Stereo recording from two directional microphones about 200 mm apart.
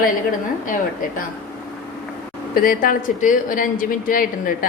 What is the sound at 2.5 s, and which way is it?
Speech, 45° left (ahead or behind).